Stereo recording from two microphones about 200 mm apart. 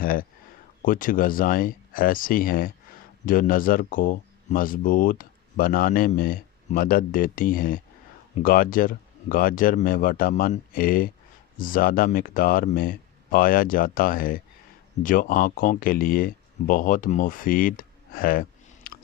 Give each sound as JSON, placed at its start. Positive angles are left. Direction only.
{"t": 0.0, "sound": "speech", "side_deg": 45}